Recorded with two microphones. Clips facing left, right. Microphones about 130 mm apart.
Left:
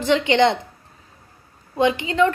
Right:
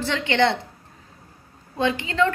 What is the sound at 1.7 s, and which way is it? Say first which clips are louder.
Speech: left 4 dB; 15° left (ahead or behind).